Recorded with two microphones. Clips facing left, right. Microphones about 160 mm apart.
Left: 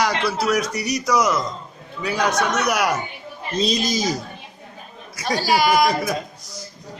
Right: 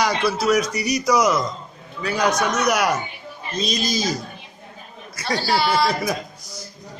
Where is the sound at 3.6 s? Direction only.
25° left (ahead or behind).